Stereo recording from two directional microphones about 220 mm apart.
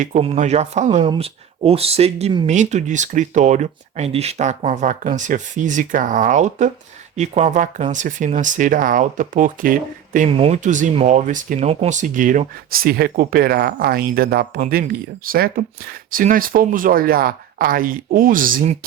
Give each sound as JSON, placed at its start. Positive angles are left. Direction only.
{"t": 0.0, "sound": "speech", "side_deg": -30}
{"t": 10.2, "sound": "speech", "side_deg": -25}